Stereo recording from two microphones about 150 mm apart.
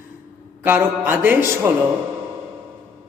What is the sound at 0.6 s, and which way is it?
Speech, 10° right (ahead or behind).